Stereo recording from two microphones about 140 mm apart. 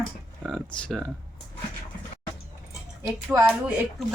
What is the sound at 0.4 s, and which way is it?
Speech, centre (ahead or behind).